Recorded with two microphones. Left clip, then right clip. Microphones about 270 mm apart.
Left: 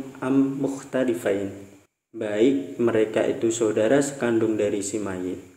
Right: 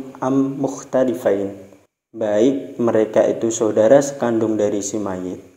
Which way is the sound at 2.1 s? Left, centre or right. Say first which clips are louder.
Right 5 dB; centre.